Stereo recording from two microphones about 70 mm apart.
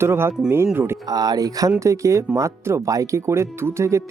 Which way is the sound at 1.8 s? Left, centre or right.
Right.